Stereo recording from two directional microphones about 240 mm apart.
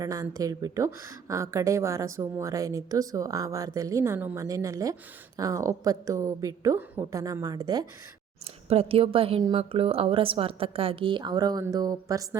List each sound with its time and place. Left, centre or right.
0.0 s a woman's voice: centre